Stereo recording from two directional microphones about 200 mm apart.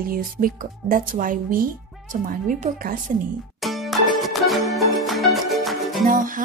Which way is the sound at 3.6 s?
Centre (ahead or behind).